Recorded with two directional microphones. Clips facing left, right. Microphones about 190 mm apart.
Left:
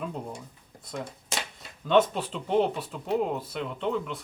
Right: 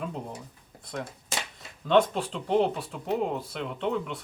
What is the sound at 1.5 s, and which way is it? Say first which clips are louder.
Speech: even; centre (ahead or behind).